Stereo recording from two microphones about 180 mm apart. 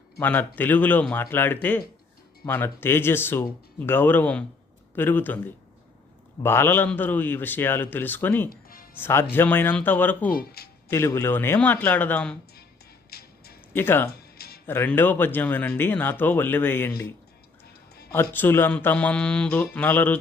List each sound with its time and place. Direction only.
0.2 s speech: 10° left (ahead or behind)
6.4 s speech: 15° left (ahead or behind)
10.3 s speech: 60° left (ahead or behind)
10.8 s speech: 15° left (ahead or behind)
13.1 s music: 60° left (ahead or behind)
13.7 s speech: 10° left (ahead or behind)
14.1 s music: 60° left (ahead or behind)
14.7 s speech: 10° left (ahead or behind)
18.1 s speech: 10° left (ahead or behind)